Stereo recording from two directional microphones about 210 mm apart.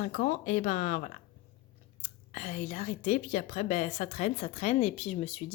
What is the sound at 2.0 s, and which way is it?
A woman's voice, 35° left (ahead or behind).